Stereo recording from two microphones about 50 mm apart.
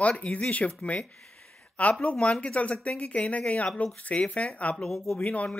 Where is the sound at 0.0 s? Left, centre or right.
Left.